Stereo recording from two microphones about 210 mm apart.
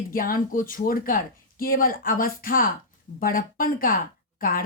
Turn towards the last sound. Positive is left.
turn(degrees=45)  # may be behind; listen again after turning